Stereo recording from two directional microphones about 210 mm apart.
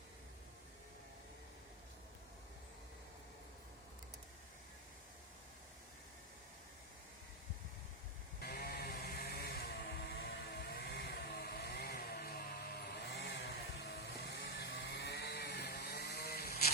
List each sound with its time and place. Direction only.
8.4 s sheep: 45° left (ahead or behind)